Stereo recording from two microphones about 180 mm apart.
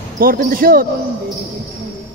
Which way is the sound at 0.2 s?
55° right (ahead or behind).